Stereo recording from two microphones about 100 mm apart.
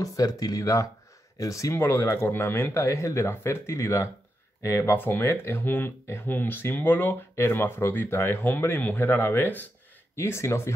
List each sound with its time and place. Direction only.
0.0 s speech: 35° left (ahead or behind)